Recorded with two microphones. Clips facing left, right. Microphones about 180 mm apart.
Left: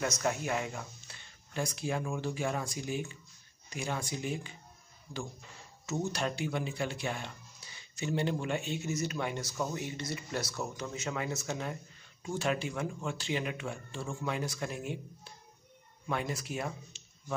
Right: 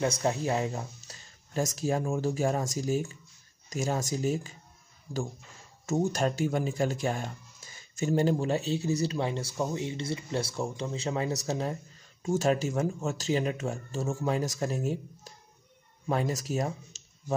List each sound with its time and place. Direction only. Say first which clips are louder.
0.0 s speech: right 5 dB; 30° right (ahead or behind)
5.1 s speech: right 7 dB; 5° right (ahead or behind)
5.9 s speech: right 6 dB; 45° right (ahead or behind)
17.0 s a sound: left 1 dB; 40° right (ahead or behind)